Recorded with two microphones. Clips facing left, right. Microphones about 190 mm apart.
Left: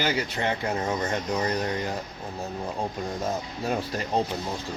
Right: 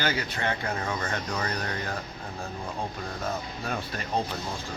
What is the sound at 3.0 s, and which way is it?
Speech, 20° left (ahead or behind).